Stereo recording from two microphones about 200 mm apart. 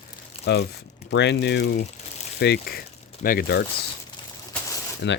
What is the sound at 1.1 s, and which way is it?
Speech, 60° left (ahead or behind).